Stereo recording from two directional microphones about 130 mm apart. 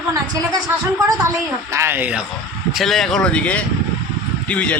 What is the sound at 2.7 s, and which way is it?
Speech, centre (ahead or behind).